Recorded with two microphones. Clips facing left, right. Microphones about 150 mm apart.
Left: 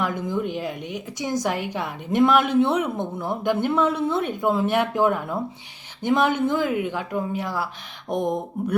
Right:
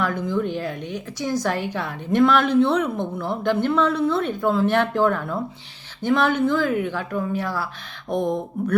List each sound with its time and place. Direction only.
0.0 s a woman's voice: 15° left (ahead or behind)